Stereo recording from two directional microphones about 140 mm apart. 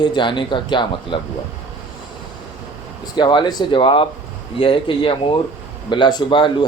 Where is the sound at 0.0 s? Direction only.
35° left (ahead or behind).